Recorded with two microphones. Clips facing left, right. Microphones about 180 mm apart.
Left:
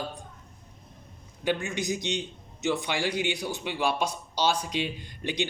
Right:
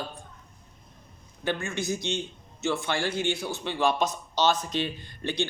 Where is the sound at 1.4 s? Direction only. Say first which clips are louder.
Left 1 dB; 15° left (ahead or behind).